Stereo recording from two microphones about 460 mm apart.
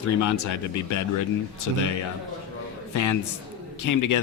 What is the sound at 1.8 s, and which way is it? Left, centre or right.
Speech, left.